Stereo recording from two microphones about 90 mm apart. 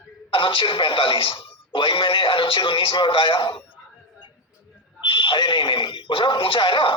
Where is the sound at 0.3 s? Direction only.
75° left (ahead or behind).